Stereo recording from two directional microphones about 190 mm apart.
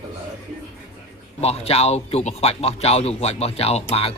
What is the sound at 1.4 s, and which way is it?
Speech, 30° left (ahead or behind).